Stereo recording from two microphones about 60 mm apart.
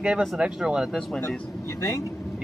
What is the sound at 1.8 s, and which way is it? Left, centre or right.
Speech, left.